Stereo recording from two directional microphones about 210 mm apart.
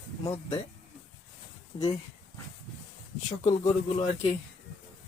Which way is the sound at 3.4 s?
35° left (ahead or behind).